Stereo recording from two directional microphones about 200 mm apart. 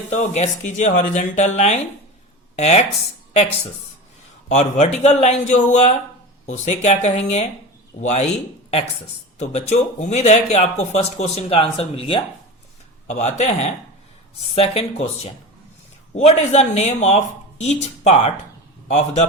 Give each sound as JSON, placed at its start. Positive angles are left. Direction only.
{"t": 0.1, "sound": "speech", "side_deg": 35}
{"t": 4.5, "sound": "speech", "side_deg": 35}
{"t": 9.4, "sound": "speech", "side_deg": 35}